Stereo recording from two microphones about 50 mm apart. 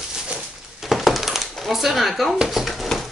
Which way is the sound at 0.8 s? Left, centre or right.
Centre.